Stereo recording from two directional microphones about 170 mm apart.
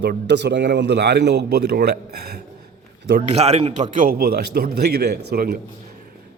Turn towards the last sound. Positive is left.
turn(degrees=-65)  # may be behind; listen again after turning